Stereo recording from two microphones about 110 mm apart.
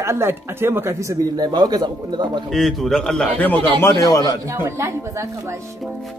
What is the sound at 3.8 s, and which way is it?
Speech, 30° left (ahead or behind).